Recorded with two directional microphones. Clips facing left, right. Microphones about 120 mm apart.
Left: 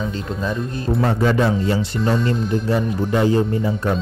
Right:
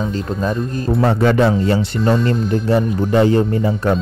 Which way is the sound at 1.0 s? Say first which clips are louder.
Right 4 dB; 70° right (ahead or behind).